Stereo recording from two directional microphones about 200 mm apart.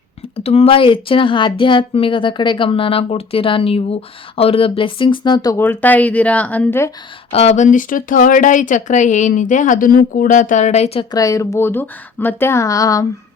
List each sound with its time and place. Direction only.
0.3 s a woman's voice: 30° left (ahead or behind); by 6.9 s 10° left (ahead or behind)
7.3 s speech: 30° left (ahead or behind)
11.1 s speech: 15° left (ahead or behind)